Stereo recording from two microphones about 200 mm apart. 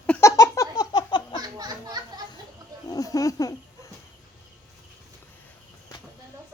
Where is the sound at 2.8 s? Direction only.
20° left (ahead or behind).